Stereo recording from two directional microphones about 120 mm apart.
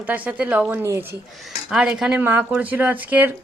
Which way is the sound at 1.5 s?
5° right (ahead or behind).